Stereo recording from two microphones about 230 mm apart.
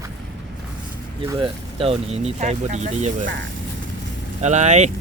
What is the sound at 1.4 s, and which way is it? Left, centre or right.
Speech, right.